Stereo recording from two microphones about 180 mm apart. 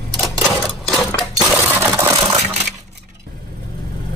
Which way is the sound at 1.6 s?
10° right (ahead or behind).